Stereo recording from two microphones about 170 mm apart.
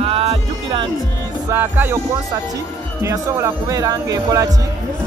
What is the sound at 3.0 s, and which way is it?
Speech, 20° right (ahead or behind).